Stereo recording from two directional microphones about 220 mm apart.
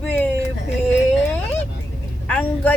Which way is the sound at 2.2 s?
5° left (ahead or behind).